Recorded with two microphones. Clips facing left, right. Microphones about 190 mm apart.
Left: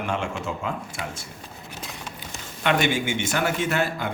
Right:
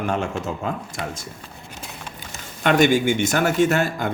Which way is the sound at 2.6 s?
40° right (ahead or behind).